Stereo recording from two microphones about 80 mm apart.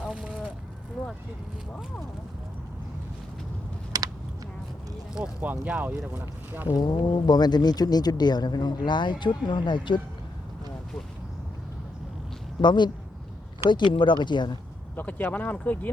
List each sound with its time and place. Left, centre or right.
0.0 s a sound: centre
3.9 s a sound: right
5.1 s speech: centre
6.7 s speech: left
12.6 s speech: left
14.9 s speech: left